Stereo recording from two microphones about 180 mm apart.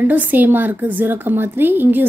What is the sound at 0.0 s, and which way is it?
A woman's voice, 10° right (ahead or behind).